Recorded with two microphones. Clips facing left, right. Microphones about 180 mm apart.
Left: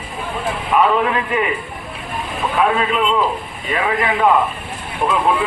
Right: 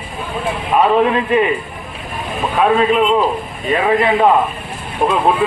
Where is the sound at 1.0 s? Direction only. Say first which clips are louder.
Right 5 dB; 30° right (ahead or behind).